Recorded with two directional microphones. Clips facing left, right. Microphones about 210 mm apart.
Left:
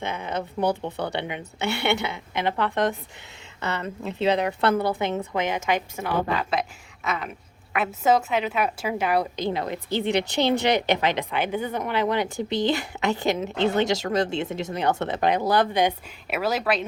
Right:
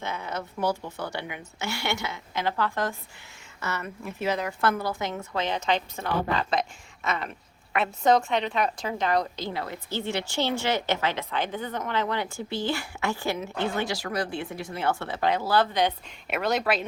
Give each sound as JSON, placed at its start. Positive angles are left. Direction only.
{"t": 0.0, "sound": "a woman's voice", "side_deg": 20}
{"t": 0.9, "sound": "speech", "side_deg": 60}
{"t": 1.2, "sound": "a woman's voice", "side_deg": 25}
{"t": 1.7, "sound": "speech", "side_deg": 60}
{"t": 2.1, "sound": "a woman's voice", "side_deg": 20}
{"t": 16.3, "sound": "speech", "side_deg": 5}